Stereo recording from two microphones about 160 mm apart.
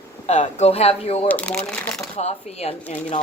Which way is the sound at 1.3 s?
10° left (ahead or behind).